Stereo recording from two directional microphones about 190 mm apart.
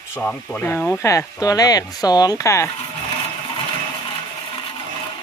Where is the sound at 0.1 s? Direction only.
10° left (ahead or behind).